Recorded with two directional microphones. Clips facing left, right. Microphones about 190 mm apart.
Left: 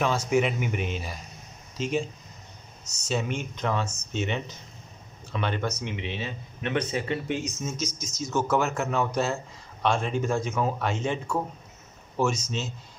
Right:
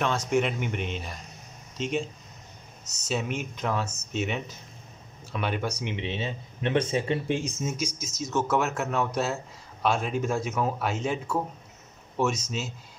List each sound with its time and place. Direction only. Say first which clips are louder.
0.3 s speech: left 1 dB; 5° left (ahead or behind)
3.1 s speech: left 1 dB; 5° right (ahead or behind)
5.9 s speech: right 2 dB; 25° right (ahead or behind)
7.6 s speech: right 1 dB; 10° right (ahead or behind)
12.4 s speech: left 1 dB; 5° right (ahead or behind)